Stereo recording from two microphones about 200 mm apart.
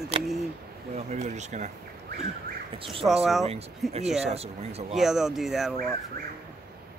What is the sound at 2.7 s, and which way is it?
Speech, 25° right (ahead or behind).